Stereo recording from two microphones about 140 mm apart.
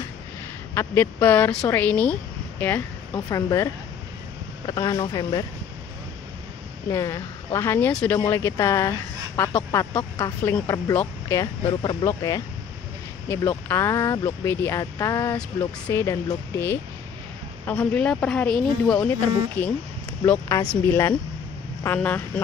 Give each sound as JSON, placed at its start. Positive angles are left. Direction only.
{"t": 0.7, "sound": "a woman's voice", "side_deg": 15}
{"t": 3.3, "sound": "speech", "side_deg": 25}
{"t": 6.9, "sound": "a woman's voice", "side_deg": 20}
{"t": 8.3, "sound": "a woman's voice", "side_deg": 20}
{"t": 9.9, "sound": "a woman's voice", "side_deg": 30}
{"t": 10.4, "sound": "speech", "side_deg": 20}
{"t": 11.6, "sound": "a woman's voice", "side_deg": 35}
{"t": 12.0, "sound": "a woman's voice", "side_deg": 20}